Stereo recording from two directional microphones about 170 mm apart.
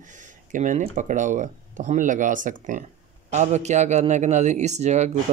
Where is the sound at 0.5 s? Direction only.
50° right (ahead or behind).